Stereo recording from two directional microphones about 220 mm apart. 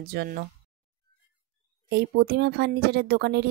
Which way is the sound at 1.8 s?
45° right (ahead or behind).